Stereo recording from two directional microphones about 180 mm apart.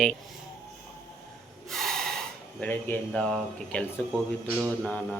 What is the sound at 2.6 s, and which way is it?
Speech, 10° left (ahead or behind).